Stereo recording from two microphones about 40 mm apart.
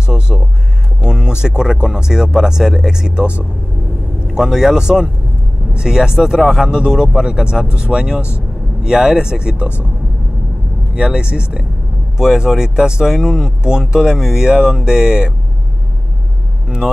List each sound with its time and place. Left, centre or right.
0.0 s speech: right
4.3 s speech: centre
11.0 s speech: right
12.2 s speech: centre
16.6 s speech: centre